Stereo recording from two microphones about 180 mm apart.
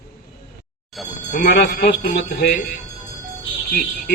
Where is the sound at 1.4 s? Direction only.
65° left (ahead or behind).